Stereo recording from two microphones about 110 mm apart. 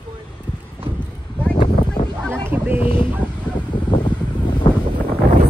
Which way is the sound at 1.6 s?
45° left (ahead or behind).